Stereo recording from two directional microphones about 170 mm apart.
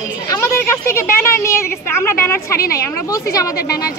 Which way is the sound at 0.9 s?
15° left (ahead or behind).